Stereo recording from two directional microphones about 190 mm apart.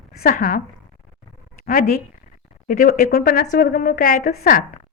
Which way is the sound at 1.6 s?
45° left (ahead or behind).